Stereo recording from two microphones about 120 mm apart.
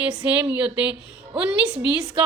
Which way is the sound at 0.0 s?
10° right (ahead or behind).